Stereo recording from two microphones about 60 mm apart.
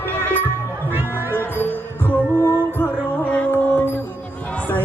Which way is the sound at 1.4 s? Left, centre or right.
Left.